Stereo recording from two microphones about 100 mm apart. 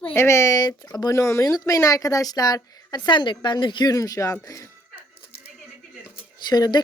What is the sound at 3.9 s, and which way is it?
Speech, 35° left (ahead or behind).